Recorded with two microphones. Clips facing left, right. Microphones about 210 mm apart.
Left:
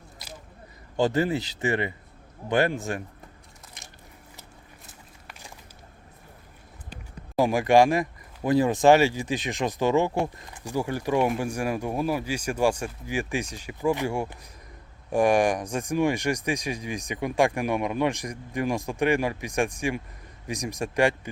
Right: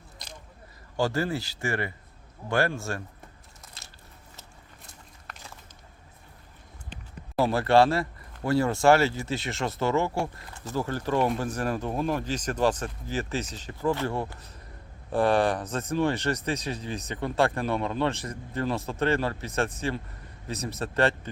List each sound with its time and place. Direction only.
0.9 s speech: 20° left (ahead or behind)
3.8 s biting: 15° left (ahead or behind)
6.9 s speech: 15° left (ahead or behind)